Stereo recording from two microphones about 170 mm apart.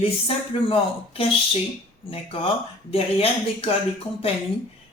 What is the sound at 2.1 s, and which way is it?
Speech, 35° left (ahead or behind).